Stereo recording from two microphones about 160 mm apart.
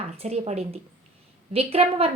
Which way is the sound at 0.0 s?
40° right (ahead or behind).